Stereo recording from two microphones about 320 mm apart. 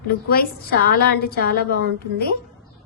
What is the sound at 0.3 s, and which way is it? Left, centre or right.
A woman's voice, left.